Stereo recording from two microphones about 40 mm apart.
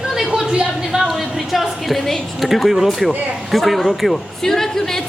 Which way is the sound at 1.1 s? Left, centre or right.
Centre.